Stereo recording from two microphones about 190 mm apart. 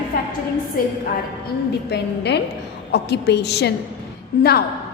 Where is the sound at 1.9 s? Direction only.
60° left (ahead or behind).